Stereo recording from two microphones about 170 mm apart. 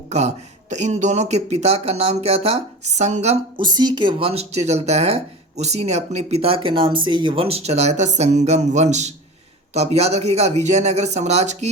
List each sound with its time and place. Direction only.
0.1 s speech: 40° right (ahead or behind)
3.6 s speech: 25° right (ahead or behind)